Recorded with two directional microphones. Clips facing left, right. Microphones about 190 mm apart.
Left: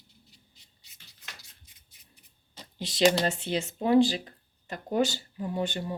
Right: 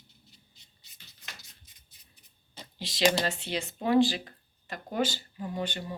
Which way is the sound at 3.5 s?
50° left (ahead or behind).